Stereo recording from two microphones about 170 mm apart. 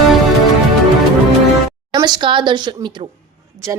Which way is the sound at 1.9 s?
25° right (ahead or behind).